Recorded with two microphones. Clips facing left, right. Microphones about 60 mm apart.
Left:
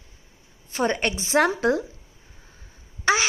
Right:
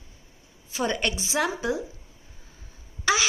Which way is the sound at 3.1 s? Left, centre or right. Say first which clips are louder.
Left 3 dB; left.